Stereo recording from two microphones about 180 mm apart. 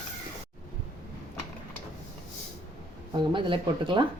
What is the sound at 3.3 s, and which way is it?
Speech, 30° right (ahead or behind).